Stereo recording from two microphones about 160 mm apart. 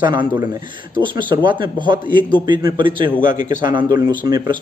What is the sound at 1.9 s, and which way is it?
Speech, 60° left (ahead or behind).